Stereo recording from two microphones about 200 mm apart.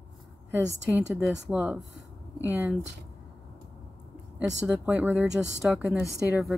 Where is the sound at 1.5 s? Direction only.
5° right (ahead or behind).